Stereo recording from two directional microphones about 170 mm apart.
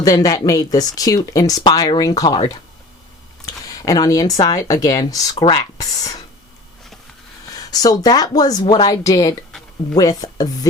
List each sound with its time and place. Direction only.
0.0 s speech: 20° left (ahead or behind)
7.5 s speech: 20° left (ahead or behind)